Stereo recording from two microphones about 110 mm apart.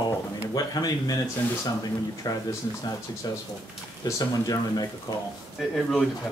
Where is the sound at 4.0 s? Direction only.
35° left (ahead or behind).